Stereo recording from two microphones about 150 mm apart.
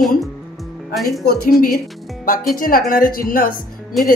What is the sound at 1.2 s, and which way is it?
Speech, 90° left.